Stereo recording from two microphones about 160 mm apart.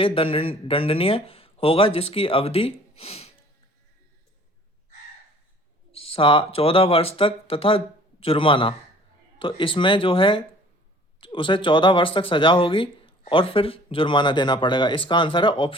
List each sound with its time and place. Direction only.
0.0 s speech: 35° left (ahead or behind)
5.9 s speech: 35° left (ahead or behind)